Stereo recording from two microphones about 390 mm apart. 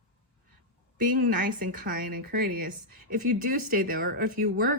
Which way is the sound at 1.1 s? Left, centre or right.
Right.